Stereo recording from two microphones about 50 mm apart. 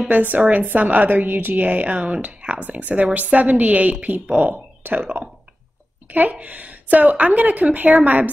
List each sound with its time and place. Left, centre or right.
0.1 s a woman's voice: right